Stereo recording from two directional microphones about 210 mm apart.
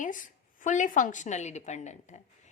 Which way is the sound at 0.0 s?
40° left (ahead or behind).